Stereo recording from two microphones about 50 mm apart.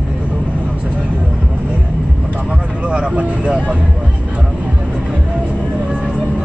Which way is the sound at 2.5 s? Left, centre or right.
Right.